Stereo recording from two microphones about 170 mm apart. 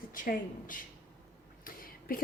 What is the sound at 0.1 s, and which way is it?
A woman's voice, 55° left (ahead or behind).